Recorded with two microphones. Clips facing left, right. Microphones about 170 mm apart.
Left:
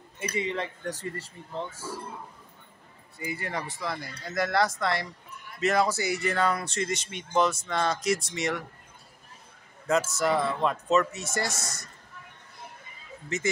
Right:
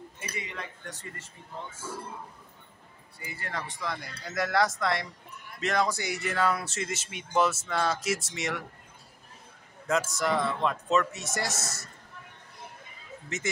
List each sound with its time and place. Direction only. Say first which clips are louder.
0.2 s speech: left 10 dB; 30° left (ahead or behind)
3.2 s speech: left 4 dB; 20° left (ahead or behind); by 8.6 s centre (ahead or behind)
10.1 s speech: left 2 dB; 5° left (ahead or behind)
13.3 s speech: left 5 dB; centre (ahead or behind)